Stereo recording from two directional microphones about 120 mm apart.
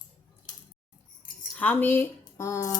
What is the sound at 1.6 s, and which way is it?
Speech, 15° left (ahead or behind).